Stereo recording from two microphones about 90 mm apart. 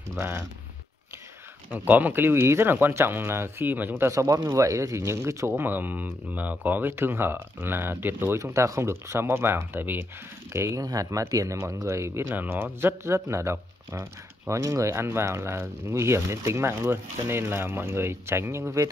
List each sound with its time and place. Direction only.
0.1 s speech: 30° right (ahead or behind)
1.7 s speech: 20° right (ahead or behind)
4.1 s speech: 35° right (ahead or behind)
5.6 s speech: 20° right (ahead or behind)
8.4 s speech: 35° right (ahead or behind)
10.5 s speech: 30° right (ahead or behind)